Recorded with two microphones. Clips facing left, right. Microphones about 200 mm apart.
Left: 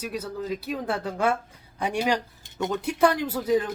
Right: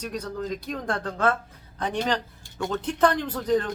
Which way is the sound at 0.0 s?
5° left (ahead or behind).